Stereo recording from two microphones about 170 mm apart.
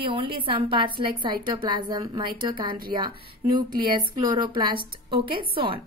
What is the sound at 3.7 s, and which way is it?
Speech, 60° right (ahead or behind).